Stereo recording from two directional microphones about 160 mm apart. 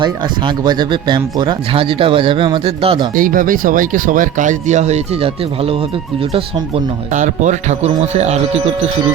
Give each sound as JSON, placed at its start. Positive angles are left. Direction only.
{"t": 0.0, "sound": "speech", "side_deg": -25}
{"t": 3.2, "sound": "speech", "side_deg": -60}
{"t": 7.1, "sound": "speech", "side_deg": -50}